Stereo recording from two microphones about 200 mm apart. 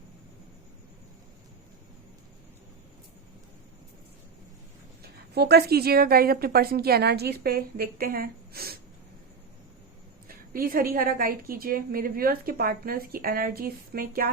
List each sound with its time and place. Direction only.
5.3 s a woman's voice: 55° right (ahead or behind)
10.2 s a woman's voice: 45° right (ahead or behind)